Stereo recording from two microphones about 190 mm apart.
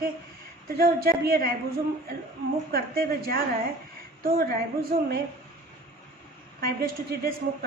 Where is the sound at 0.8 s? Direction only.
50° right (ahead or behind).